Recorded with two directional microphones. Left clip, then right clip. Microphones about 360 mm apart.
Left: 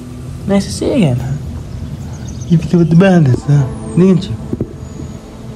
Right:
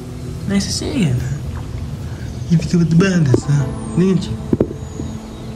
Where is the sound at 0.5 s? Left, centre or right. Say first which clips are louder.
Left 7 dB; centre.